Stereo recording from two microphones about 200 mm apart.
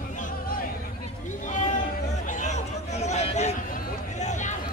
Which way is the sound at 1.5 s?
40° left (ahead or behind).